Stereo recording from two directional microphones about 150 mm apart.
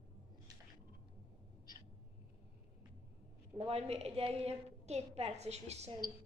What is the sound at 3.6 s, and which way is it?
A woman's voice, 40° right (ahead or behind).